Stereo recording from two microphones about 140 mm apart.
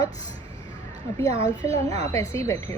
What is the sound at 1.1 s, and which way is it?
Speech, 25° left (ahead or behind).